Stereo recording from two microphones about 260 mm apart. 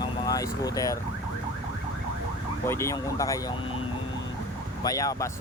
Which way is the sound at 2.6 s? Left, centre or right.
Centre.